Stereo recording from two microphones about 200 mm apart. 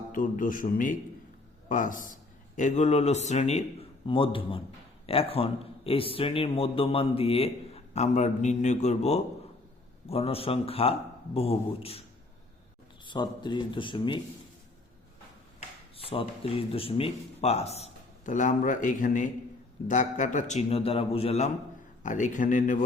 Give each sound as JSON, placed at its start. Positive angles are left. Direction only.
{"t": 0.1, "sound": "a man's voice", "side_deg": 40}
{"t": 13.1, "sound": "a man's voice", "side_deg": 25}
{"t": 16.0, "sound": "speech", "side_deg": 25}